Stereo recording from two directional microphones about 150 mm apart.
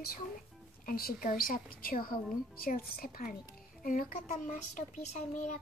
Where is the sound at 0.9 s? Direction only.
75° left (ahead or behind); by 5.5 s 55° left (ahead or behind).